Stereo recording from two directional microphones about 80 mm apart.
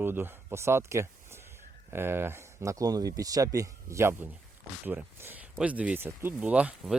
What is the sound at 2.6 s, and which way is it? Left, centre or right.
Speech, right.